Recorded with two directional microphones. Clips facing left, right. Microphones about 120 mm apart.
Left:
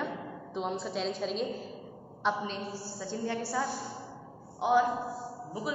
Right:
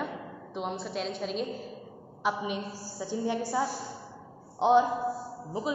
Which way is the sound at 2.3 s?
15° right (ahead or behind).